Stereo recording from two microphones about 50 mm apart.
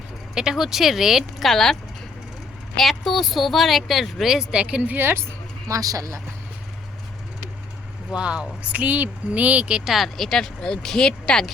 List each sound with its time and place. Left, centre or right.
0.3 s speech: centre
4.5 s a woman's voice: right
8.1 s speech: right
9.8 s speech: centre
10.2 s speech: centre